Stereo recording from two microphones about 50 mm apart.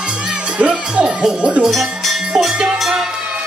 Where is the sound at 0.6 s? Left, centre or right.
Centre.